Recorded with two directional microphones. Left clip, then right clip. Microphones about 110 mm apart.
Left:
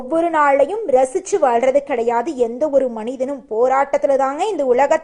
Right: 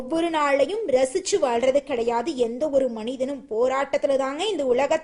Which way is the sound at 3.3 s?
25° right (ahead or behind).